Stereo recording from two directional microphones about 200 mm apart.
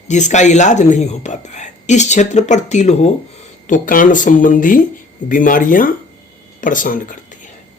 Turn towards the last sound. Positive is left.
turn(degrees=40)  # may be behind; listen again after turning